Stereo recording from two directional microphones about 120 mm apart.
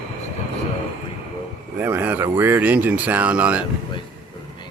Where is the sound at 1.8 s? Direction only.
15° right (ahead or behind).